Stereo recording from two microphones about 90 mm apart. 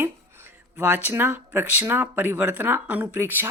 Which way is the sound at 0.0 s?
25° right (ahead or behind).